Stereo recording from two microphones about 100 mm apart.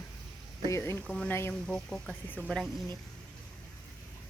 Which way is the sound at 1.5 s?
5° left (ahead or behind).